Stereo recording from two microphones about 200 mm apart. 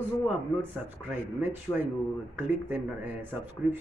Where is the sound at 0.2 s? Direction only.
10° right (ahead or behind).